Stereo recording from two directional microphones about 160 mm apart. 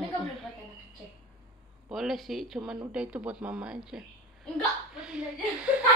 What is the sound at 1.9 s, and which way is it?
A woman's voice, centre (ahead or behind).